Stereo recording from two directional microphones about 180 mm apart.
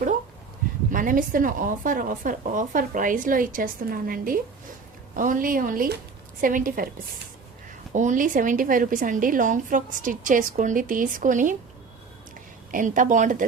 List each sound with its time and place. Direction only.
0.9 s a woman's voice: 50° right (ahead or behind)
7.9 s a woman's voice: 45° right (ahead or behind)
12.7 s a woman's voice: 45° right (ahead or behind)